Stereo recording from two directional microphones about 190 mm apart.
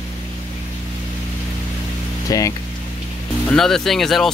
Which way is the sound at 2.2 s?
20° left (ahead or behind).